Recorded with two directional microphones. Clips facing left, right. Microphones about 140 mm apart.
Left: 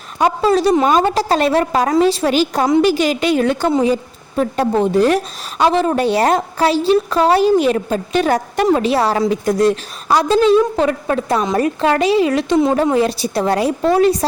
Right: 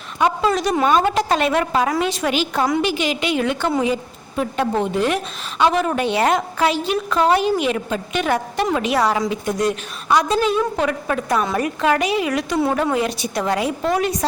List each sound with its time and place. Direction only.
0.2 s a woman's voice: 35° left (ahead or behind)